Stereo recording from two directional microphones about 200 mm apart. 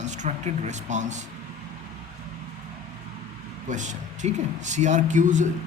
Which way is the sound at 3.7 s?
35° right (ahead or behind).